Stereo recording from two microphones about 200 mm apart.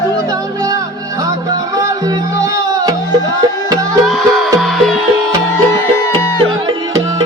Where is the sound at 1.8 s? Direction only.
20° right (ahead or behind).